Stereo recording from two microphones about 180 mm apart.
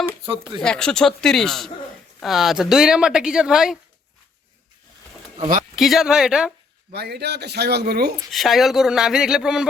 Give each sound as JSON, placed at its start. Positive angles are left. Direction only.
{"t": 0.6, "sound": "speech", "side_deg": 5}
{"t": 5.7, "sound": "speech", "side_deg": 0}
{"t": 6.9, "sound": "speech", "side_deg": -65}
{"t": 8.3, "sound": "speech", "side_deg": 0}